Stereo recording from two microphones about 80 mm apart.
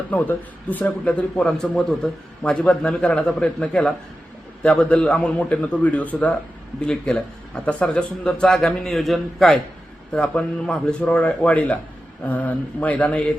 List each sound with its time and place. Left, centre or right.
0.1 s speech: left
1.7 s speech: centre
2.4 s a man's voice: centre
10.1 s a man's voice: centre